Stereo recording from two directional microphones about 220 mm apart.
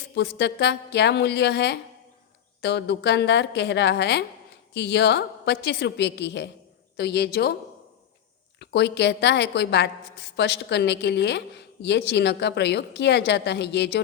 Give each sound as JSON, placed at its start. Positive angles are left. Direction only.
{"t": 0.2, "sound": "a woman's voice", "side_deg": 50}
{"t": 8.5, "sound": "a woman's voice", "side_deg": 50}